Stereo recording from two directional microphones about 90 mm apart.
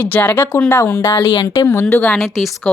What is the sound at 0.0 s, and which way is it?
Speech, 20° left (ahead or behind).